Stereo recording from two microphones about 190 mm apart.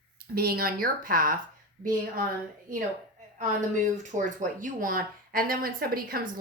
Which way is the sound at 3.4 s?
40° right (ahead or behind).